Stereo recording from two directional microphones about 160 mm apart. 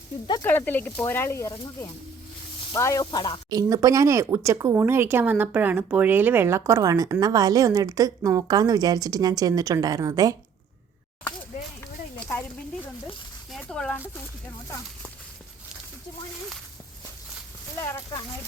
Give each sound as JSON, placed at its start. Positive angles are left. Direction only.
{"t": 0.4, "sound": "speech", "side_deg": 10}
{"t": 3.5, "sound": "speech", "side_deg": -20}
{"t": 13.5, "sound": "speech", "side_deg": 5}
{"t": 17.7, "sound": "speech", "side_deg": 25}